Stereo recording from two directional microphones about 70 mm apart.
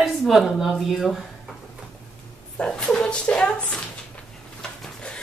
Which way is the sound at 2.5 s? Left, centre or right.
Centre.